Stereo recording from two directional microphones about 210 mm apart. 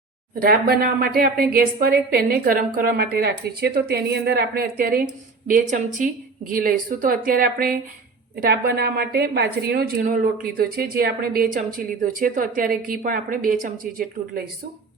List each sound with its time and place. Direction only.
0.3 s a woman's voice: 45° right (ahead or behind)